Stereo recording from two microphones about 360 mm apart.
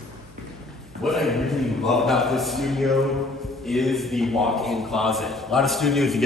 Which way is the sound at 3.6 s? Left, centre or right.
Centre.